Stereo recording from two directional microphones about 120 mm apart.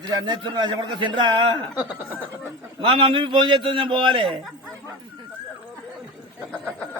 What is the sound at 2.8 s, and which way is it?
A man's voice, 45° right (ahead or behind).